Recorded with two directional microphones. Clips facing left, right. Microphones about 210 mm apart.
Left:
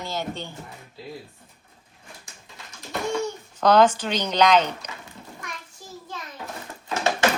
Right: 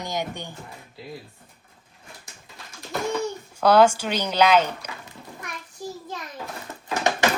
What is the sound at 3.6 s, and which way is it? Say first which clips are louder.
Speech: right 1 dB; 10° right (ahead or behind).